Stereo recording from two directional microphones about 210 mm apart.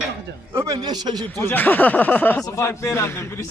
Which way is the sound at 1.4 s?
10° left (ahead or behind).